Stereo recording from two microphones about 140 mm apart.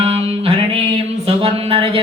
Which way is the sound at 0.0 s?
45° right (ahead or behind).